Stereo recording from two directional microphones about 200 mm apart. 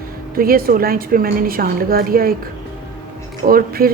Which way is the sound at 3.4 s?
45° right (ahead or behind).